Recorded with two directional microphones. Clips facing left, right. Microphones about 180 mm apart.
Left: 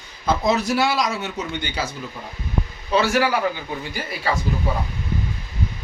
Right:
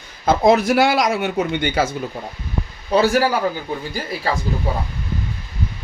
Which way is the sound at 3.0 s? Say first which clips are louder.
Right 4 dB; 40° right (ahead or behind).